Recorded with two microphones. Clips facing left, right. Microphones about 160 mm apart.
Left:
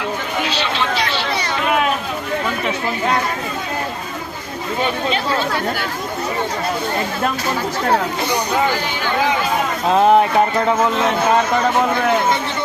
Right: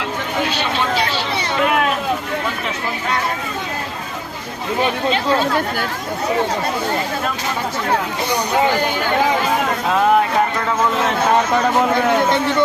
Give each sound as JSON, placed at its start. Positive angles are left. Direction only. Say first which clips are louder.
{"t": 9.9, "sound": "speech", "louder": "left 3 dB", "side_deg": 20}